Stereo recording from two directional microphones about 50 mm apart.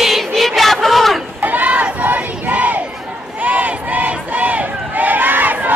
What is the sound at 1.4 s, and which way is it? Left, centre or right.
Crowd, right.